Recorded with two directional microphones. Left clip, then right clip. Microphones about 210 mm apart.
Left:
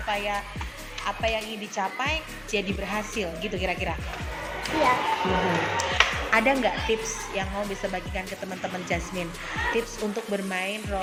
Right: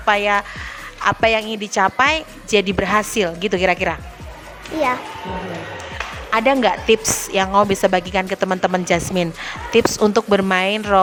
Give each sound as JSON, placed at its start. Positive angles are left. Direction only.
{"t": 0.1, "sound": "a woman's voice", "side_deg": -50}
{"t": 6.3, "sound": "a woman's voice", "side_deg": -35}